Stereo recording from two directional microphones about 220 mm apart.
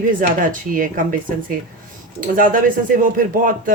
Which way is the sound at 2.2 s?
40° right (ahead or behind).